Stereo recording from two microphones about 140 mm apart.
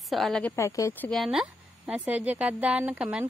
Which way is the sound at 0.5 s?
20° left (ahead or behind).